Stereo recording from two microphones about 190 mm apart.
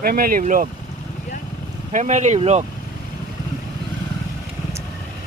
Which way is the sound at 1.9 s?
40° right (ahead or behind).